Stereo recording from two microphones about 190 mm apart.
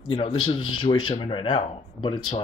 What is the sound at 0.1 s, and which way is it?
Speech, 25° left (ahead or behind).